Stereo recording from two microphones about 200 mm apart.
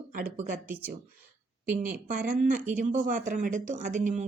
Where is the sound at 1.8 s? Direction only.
40° right (ahead or behind).